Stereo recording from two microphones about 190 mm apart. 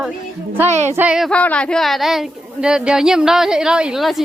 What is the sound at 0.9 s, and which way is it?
A woman's voice, 5° right (ahead or behind).